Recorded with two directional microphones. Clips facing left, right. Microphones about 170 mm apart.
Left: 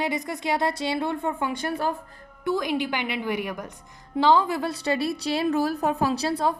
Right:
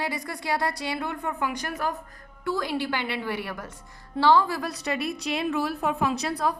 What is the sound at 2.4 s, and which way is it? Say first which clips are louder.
A woman's voice: left 3 dB; 20° left (ahead or behind).